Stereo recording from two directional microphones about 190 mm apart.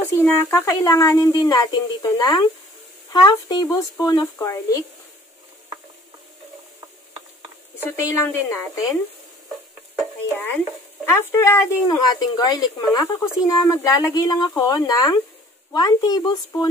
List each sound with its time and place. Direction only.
0.2 s speech: 15° left (ahead or behind)
7.8 s speech: 15° left (ahead or behind)
10.3 s speech: 10° left (ahead or behind)